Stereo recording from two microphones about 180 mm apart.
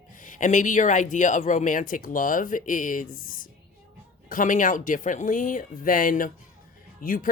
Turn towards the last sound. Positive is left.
turn(degrees=50)  # may be behind; listen again after turning